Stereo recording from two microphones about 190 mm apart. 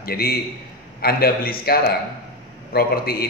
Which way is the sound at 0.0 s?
55° left (ahead or behind).